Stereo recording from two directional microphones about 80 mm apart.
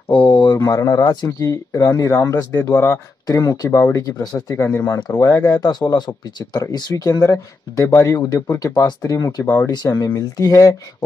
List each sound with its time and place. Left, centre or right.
0.1 s a sound: left
0.6 s speech: left
3.3 s speech: left
5.6 s speech: left